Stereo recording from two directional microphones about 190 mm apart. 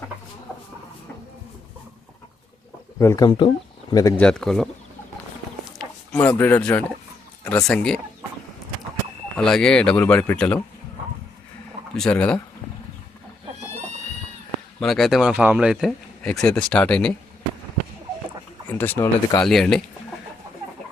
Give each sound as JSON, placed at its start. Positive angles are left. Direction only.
{"t": 3.0, "sound": "speech", "side_deg": 15}
{"t": 3.2, "sound": "speech", "side_deg": 25}
{"t": 4.2, "sound": "speech", "side_deg": 5}
{"t": 5.8, "sound": "speech", "side_deg": 5}
{"t": 9.4, "sound": "speech", "side_deg": 0}
{"t": 11.9, "sound": "speech", "side_deg": 5}
{"t": 14.8, "sound": "speech", "side_deg": 0}
{"t": 18.7, "sound": "speech", "side_deg": 10}